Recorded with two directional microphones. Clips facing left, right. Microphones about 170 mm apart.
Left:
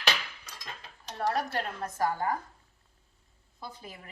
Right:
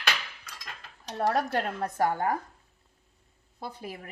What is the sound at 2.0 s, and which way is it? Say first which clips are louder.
Speech: right 3 dB; 60° right (ahead or behind).